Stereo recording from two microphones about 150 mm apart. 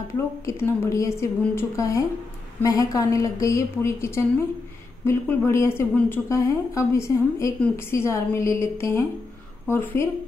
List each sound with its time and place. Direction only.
0.5 s a woman's voice: 20° left (ahead or behind)